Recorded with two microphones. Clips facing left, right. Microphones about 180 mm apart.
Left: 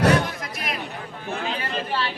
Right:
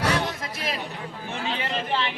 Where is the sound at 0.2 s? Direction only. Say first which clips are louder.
Left 1 dB; 30° right (ahead or behind).